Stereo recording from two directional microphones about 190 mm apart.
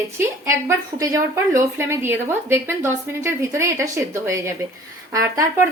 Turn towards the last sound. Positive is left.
turn(degrees=-15)  # may be behind; listen again after turning